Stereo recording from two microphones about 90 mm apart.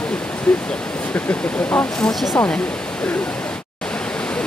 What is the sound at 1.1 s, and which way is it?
Speech, 15° left (ahead or behind).